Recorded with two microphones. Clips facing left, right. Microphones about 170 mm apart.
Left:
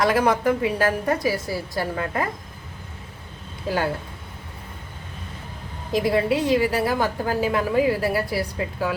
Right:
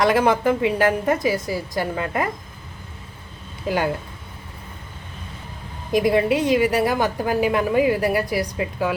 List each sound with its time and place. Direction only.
0.0 s a woman's voice: 25° right (ahead or behind)
5.9 s a woman's voice: 20° right (ahead or behind)